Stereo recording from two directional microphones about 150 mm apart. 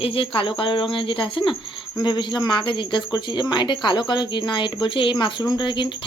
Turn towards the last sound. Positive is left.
turn(degrees=30)  # may be behind; listen again after turning